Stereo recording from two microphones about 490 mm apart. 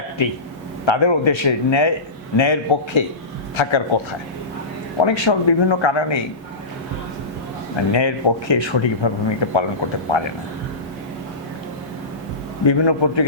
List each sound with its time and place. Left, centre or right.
0.9 s a man's voice: left
5.0 s a man's voice: left
7.9 s a man's voice: left
12.6 s a man's voice: left